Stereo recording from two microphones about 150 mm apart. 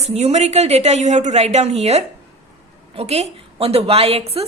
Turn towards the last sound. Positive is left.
turn(degrees=-40)  # may be behind; listen again after turning